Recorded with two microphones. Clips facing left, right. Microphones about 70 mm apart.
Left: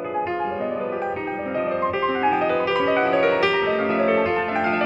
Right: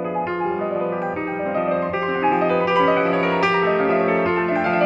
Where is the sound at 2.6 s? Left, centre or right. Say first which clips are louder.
Right 4 dB; right.